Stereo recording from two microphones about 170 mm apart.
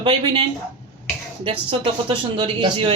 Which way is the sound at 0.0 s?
30° right (ahead or behind).